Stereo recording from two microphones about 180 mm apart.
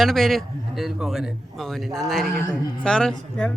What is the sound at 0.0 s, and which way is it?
A man's voice, centre (ahead or behind).